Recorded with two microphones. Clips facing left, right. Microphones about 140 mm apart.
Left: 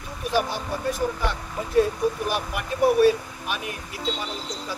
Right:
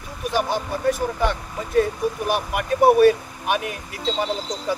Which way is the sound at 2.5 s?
65° right (ahead or behind).